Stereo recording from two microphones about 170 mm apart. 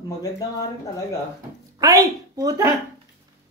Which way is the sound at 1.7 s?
20° right (ahead or behind).